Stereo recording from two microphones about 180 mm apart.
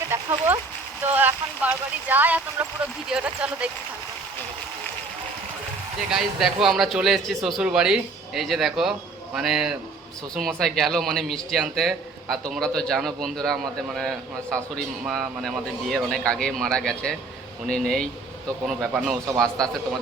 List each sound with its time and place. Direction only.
0.1 s speech: 15° right (ahead or behind)
1.1 s a sound: 10° right (ahead or behind)
3.1 s speech: 5° right (ahead or behind)
6.1 s speech: centre (ahead or behind)